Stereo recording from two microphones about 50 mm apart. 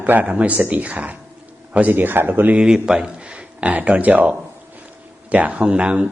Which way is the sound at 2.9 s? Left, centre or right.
Right.